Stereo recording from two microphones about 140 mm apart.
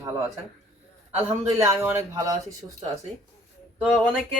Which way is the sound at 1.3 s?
20° right (ahead or behind).